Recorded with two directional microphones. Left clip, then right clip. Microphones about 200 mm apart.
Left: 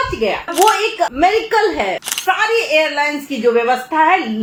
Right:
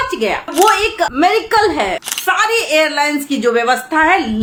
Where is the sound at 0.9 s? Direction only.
20° right (ahead or behind).